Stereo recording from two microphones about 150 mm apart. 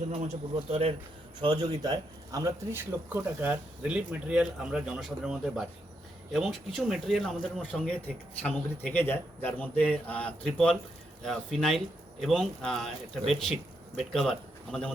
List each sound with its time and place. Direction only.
0.1 s speech: 45° right (ahead or behind)
1.4 s speech: 30° right (ahead or behind); by 14.9 s 5° left (ahead or behind)